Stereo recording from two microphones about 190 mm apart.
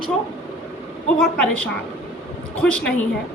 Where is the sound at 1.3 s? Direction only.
5° left (ahead or behind).